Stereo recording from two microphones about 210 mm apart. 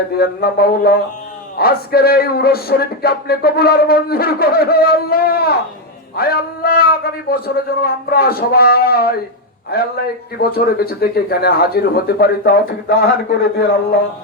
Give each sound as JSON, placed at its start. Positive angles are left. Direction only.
{"t": 0.1, "sound": "music", "side_deg": 45}